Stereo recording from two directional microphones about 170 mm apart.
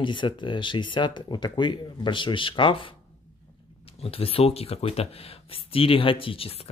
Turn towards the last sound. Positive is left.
turn(degrees=35)  # may be behind; listen again after turning